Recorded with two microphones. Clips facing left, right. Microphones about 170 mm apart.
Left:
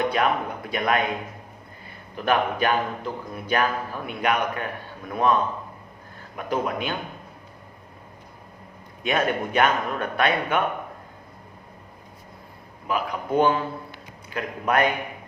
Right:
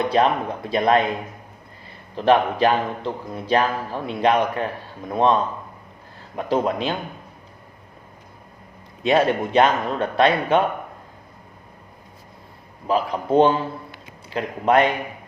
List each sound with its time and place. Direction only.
0.1 s a man's voice: 30° right (ahead or behind)
2.1 s a man's voice: 30° right (ahead or behind)
9.0 s a man's voice: 30° right (ahead or behind)
12.9 s a man's voice: 30° right (ahead or behind)